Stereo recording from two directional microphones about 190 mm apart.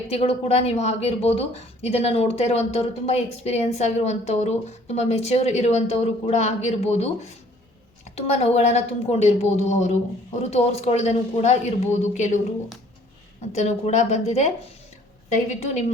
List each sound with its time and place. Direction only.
0.1 s a woman's voice: 30° left (ahead or behind)
8.1 s a woman's voice: 35° left (ahead or behind)
13.5 s a woman's voice: 35° left (ahead or behind)